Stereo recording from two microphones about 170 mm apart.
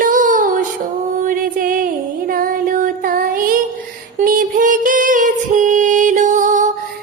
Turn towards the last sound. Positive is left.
turn(degrees=-50)  # may be behind; listen again after turning